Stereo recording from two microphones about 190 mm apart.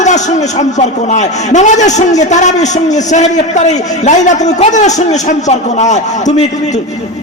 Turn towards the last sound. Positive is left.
turn(degrees=35)  # may be behind; listen again after turning